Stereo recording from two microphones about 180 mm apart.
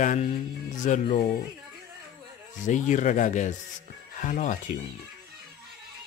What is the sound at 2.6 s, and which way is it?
Speech, 45° left (ahead or behind).